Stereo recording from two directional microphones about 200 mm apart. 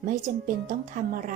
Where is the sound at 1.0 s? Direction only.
45° right (ahead or behind).